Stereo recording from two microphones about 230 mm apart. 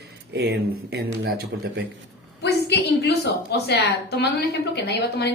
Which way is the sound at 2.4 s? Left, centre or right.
Left.